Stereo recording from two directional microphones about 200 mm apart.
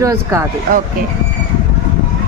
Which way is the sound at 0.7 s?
45° right (ahead or behind).